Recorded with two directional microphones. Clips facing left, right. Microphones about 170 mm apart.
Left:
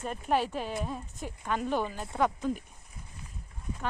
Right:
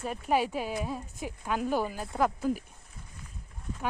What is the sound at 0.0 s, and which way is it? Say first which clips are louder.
Speech: right 1 dB; 5° right (ahead or behind).